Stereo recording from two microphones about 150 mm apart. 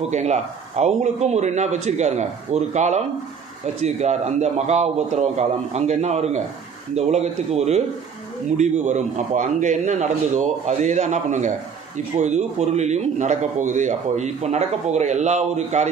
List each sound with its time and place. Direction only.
0.1 s a man's voice: 50° right (ahead or behind)